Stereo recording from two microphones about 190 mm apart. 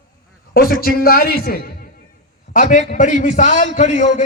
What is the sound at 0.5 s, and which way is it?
A man's voice, 50° left (ahead or behind).